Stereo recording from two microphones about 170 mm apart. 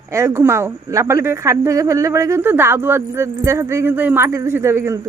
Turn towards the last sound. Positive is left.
turn(degrees=-15)  # may be behind; listen again after turning